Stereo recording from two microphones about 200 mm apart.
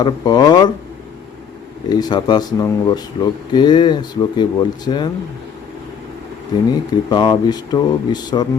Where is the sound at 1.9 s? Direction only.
20° left (ahead or behind).